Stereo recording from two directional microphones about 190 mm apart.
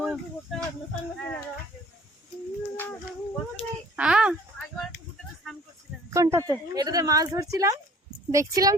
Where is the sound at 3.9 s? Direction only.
5° right (ahead or behind).